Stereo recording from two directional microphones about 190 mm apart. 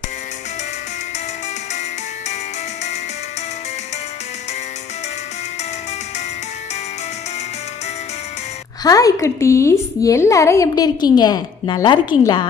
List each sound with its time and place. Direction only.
1.7 s music: 40° left (ahead or behind)
8.8 s a woman's voice: 20° left (ahead or behind)